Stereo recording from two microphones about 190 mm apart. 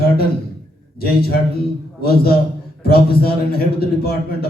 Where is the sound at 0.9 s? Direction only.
55° left (ahead or behind).